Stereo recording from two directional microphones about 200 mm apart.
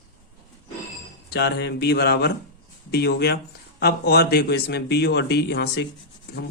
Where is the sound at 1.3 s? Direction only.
55° left (ahead or behind).